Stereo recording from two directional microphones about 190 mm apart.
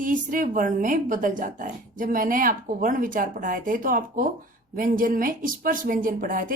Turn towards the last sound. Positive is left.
turn(degrees=-45)  # may be behind; listen again after turning